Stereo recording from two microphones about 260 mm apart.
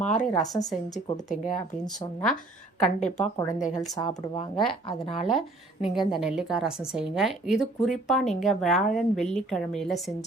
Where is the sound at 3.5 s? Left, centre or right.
Left.